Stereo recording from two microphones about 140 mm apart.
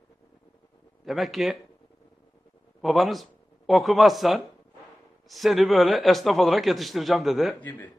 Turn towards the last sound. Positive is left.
turn(degrees=0)  # may be behind; listen again after turning